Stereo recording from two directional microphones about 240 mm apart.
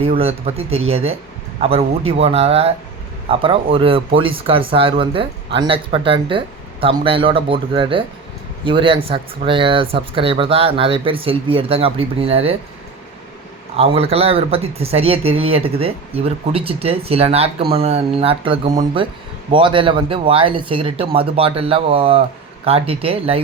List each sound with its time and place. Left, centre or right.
0.2 s speech: right
13.7 s speech: right